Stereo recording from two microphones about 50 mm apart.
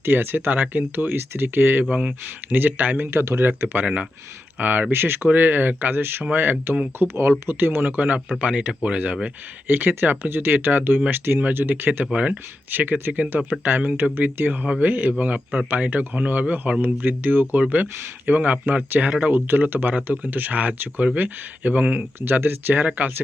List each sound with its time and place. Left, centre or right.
0.0 s speech: right
1.8 s speech: centre
2.5 s speech: right
3.2 s speech: right
3.4 s speech: right
4.9 s speech: right
9.6 s speech: right
12.1 s speech: right
12.7 s speech: right
16.8 s speech: right
22.2 s speech: right